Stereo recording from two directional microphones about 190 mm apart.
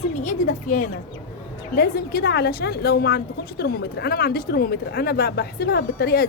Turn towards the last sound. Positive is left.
turn(degrees=55)  # may be behind; listen again after turning